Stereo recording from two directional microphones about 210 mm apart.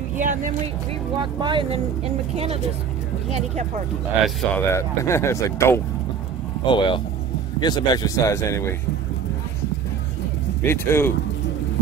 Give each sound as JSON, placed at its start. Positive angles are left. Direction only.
{"t": 0.2, "sound": "speech", "side_deg": -40}
{"t": 1.1, "sound": "speech", "side_deg": -20}
{"t": 4.5, "sound": "speech", "side_deg": 10}
{"t": 10.6, "sound": "speech", "side_deg": 10}